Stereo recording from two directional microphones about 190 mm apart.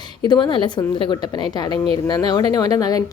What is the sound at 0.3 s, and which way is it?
Speech, 25° left (ahead or behind).